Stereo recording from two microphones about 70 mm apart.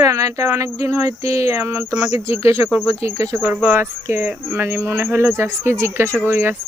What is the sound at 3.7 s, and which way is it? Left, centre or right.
Speech, right.